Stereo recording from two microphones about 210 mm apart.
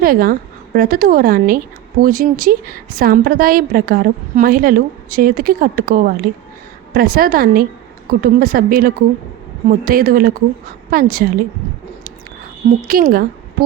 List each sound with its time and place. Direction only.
0.0 s speech: 45° right (ahead or behind)
12.9 s a woman's voice: 45° right (ahead or behind)